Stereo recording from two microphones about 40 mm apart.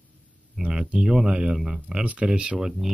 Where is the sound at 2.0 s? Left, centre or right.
Right.